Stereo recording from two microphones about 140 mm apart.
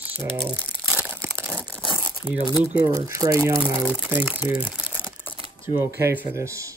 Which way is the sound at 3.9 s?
10° right (ahead or behind).